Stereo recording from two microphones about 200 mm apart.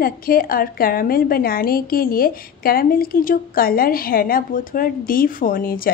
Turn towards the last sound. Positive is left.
turn(degrees=45)  # may be behind; listen again after turning